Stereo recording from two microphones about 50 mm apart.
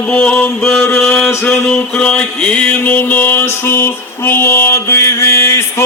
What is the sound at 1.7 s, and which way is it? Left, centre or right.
Mantra, centre.